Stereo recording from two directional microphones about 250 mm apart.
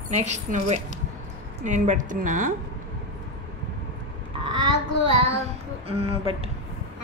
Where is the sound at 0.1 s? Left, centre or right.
Right.